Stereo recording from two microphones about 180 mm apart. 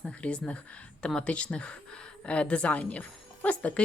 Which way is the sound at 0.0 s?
5° left (ahead or behind).